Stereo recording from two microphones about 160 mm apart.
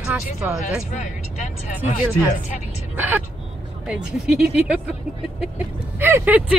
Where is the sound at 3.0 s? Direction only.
10° right (ahead or behind).